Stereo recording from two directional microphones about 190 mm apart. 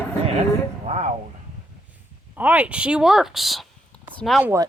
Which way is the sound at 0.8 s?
35° right (ahead or behind).